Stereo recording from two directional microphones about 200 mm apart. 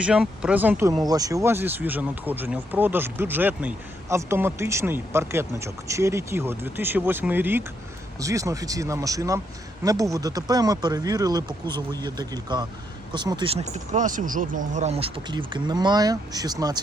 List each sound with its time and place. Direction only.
0.0 s speech: 5° right (ahead or behind)